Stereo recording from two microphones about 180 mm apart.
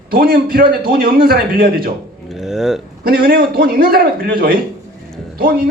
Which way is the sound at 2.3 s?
Centre (ahead or behind).